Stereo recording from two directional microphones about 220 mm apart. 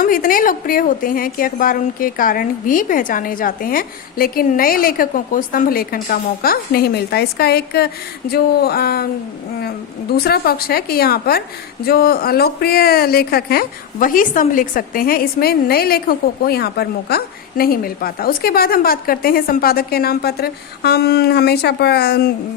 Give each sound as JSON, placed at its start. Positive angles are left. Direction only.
{"t": 0.0, "sound": "a woman's voice", "side_deg": 40}
{"t": 10.2, "sound": "a woman's voice", "side_deg": 45}